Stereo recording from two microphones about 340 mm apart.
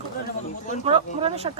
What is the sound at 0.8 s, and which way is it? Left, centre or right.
Speech, centre.